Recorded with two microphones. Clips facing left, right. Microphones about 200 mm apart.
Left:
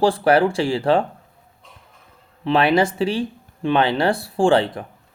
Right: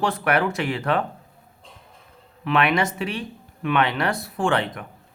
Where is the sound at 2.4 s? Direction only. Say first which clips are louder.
Left 4 dB; 30° left (ahead or behind).